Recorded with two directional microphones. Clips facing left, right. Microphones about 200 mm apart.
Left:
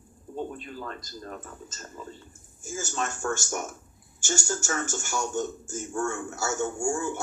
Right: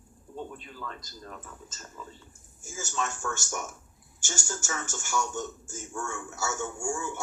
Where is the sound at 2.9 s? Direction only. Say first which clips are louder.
Left 2 dB; 50° left (ahead or behind).